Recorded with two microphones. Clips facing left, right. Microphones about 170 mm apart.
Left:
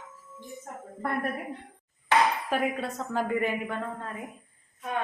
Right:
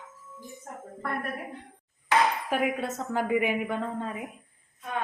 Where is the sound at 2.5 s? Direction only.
10° right (ahead or behind).